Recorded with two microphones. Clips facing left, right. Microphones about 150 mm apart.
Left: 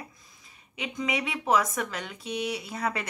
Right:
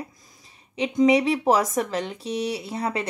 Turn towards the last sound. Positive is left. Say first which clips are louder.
# right 4 dB
turn(degrees=-30)  # may be behind; listen again after turning